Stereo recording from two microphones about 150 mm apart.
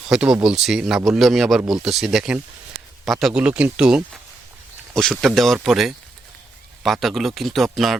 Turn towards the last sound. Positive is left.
turn(degrees=0)  # may be behind; listen again after turning